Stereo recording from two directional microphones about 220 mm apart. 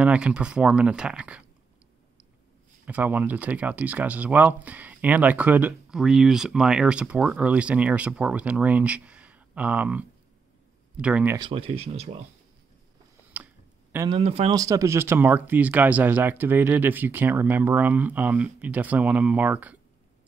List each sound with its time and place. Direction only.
0.0 s speech: 5° right (ahead or behind)
2.8 s speech: 5° right (ahead or behind)
11.3 s speech: 20° right (ahead or behind)
13.4 s tick-tock: 5° right (ahead or behind)
14.0 s speech: 25° right (ahead or behind); by 19.8 s 5° right (ahead or behind)